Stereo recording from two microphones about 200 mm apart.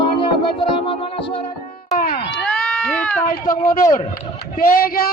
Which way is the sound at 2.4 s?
5° left (ahead or behind).